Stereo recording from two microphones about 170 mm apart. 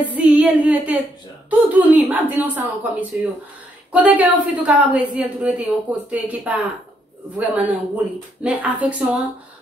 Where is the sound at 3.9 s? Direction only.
10° right (ahead or behind).